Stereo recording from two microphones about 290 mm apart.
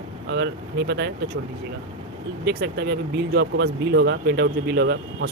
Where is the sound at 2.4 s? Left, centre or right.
Right.